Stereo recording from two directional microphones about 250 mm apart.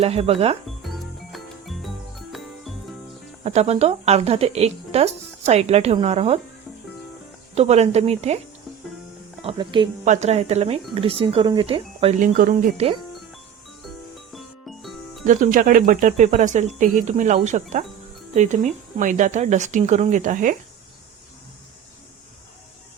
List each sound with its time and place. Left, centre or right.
0.0 s speech: right
0.9 s music: centre
3.4 s speech: right
7.5 s speech: right
9.4 s speech: right
14.3 s music: centre
15.2 s speech: right